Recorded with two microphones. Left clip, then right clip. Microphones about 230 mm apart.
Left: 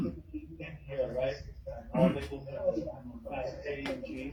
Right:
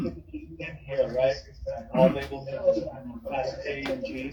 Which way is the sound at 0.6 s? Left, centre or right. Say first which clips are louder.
Right 8 dB; right.